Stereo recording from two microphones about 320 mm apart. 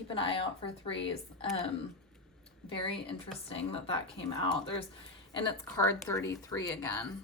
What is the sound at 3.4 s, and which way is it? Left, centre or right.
Speech, centre.